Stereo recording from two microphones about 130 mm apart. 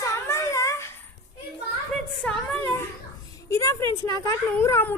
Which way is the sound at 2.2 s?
10° left (ahead or behind).